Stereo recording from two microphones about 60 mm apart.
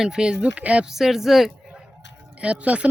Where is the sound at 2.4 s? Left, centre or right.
Right.